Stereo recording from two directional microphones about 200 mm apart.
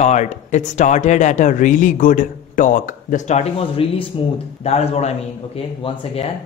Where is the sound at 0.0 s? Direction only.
35° left (ahead or behind).